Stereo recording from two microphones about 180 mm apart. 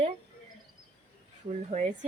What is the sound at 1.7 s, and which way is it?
Speech, 40° right (ahead or behind).